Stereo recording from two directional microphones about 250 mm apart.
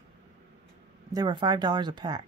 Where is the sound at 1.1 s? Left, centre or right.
Centre.